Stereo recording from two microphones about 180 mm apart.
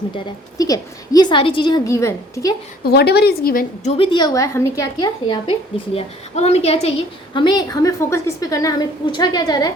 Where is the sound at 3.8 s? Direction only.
25° left (ahead or behind).